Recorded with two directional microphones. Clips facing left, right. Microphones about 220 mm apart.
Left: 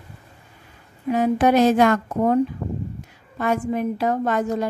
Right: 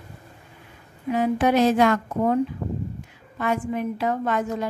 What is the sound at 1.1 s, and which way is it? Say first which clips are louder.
Speech: left 3 dB; 45° left (ahead or behind).